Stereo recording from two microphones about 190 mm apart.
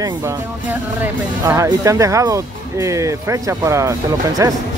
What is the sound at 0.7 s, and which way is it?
Speech, 10° right (ahead or behind).